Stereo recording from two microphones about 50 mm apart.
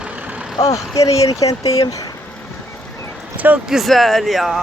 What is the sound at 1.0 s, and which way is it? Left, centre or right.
Speech, left.